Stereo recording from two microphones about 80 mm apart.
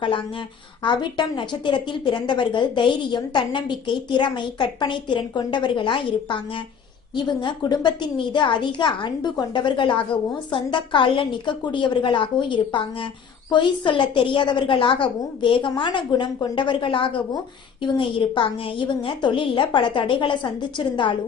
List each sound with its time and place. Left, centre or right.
0.9 s a woman's voice: left
7.3 s a woman's voice: left